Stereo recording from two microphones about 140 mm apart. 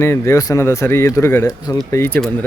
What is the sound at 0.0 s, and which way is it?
Speech, 20° left (ahead or behind).